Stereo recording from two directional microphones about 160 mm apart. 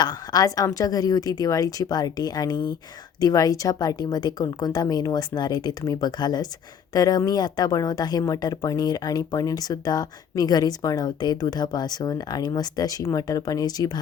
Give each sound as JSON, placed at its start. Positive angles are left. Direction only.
{"t": 0.0, "sound": "a woman's voice", "side_deg": 25}